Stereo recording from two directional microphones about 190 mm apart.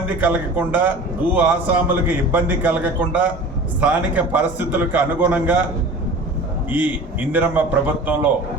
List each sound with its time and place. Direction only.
0.2 s a man's voice: 10° right (ahead or behind)
6.7 s a man's voice: 10° right (ahead or behind)